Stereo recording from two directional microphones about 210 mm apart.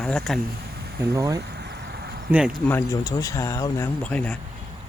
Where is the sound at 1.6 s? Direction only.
50° right (ahead or behind).